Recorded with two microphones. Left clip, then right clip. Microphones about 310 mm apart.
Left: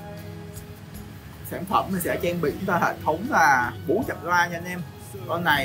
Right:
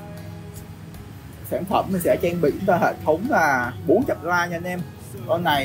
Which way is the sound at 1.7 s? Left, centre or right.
Centre.